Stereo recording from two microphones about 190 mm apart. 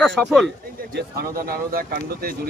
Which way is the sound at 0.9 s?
50° right (ahead or behind).